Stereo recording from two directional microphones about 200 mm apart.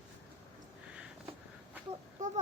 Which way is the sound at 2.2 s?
40° right (ahead or behind).